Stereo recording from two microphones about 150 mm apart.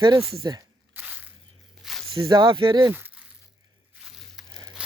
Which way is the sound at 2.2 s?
30° right (ahead or behind).